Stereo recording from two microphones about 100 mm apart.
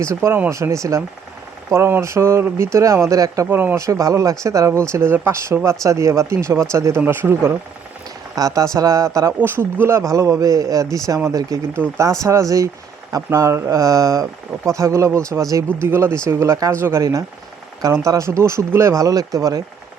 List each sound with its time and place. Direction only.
0.0 s speech: 25° right (ahead or behind)
3.4 s speech: 20° right (ahead or behind)
3.8 s speech: 30° right (ahead or behind)
8.4 s speech: 35° right (ahead or behind)